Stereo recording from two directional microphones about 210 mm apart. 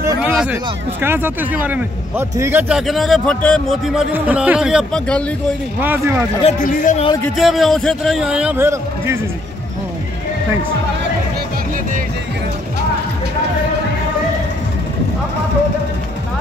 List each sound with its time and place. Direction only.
0.0 s hubbub: 10° right (ahead or behind)
0.3 s speech: 5° right (ahead or behind)
5.8 s speech: 10° right (ahead or behind)
6.4 s a man's voice: 40° left (ahead or behind)
7.3 s speech: centre (ahead or behind)